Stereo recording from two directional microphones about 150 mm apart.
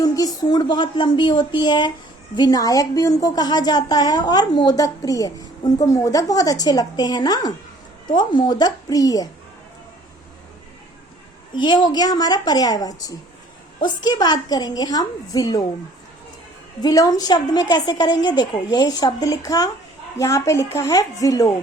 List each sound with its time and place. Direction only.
0.0 s a woman's voice: 25° left (ahead or behind)
11.5 s a woman's voice: 30° left (ahead or behind)
16.8 s a woman's voice: 25° left (ahead or behind)